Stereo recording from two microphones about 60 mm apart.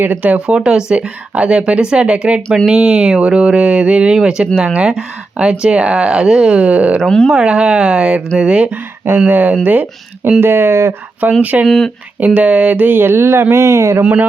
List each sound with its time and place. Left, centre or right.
0.0 s speech: right
0.5 s speech: centre
7.0 s speech: centre
7.3 s speech: centre
8.7 s speech: right
10.4 s speech: right
11.2 s speech: right
11.6 s speech: centre
12.2 s speech: right
14.0 s speech: centre